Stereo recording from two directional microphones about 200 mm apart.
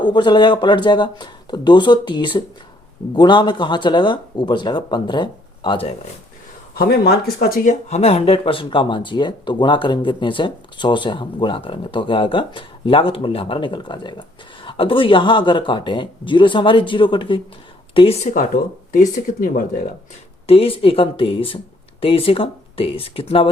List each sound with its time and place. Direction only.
0.0 s speech: 20° left (ahead or behind)
6.7 s speech: 50° left (ahead or behind)
20.5 s speech: 30° left (ahead or behind)